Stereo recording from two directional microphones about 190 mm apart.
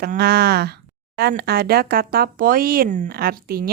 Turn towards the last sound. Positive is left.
turn(degrees=-50)  # may be behind; listen again after turning